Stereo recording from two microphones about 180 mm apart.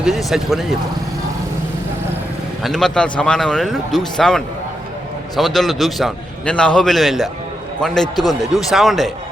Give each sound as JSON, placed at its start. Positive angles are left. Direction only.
{"t": 0.0, "sound": "a man's voice", "side_deg": 0}
{"t": 2.6, "sound": "a man's voice", "side_deg": 0}